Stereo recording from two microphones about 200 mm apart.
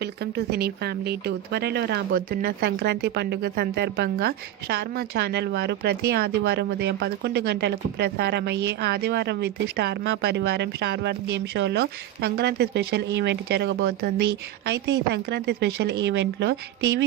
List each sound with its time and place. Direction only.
0.0 s speech: 55° right (ahead or behind)